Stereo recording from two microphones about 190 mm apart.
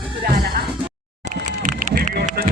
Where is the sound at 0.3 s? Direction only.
55° right (ahead or behind).